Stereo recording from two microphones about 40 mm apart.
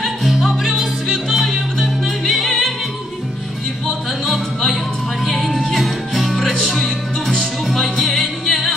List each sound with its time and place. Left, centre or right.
0.0 s music: centre
0.7 s music: centre
1.3 s music: centre
4.3 s music: centre